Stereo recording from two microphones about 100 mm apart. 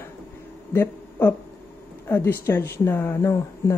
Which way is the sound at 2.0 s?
25° left (ahead or behind).